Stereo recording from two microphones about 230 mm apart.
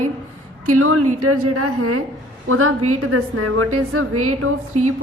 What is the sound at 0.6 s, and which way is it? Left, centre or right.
A woman's voice, right.